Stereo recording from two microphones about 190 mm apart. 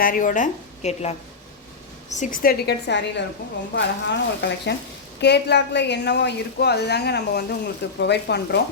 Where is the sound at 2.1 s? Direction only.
45° left (ahead or behind).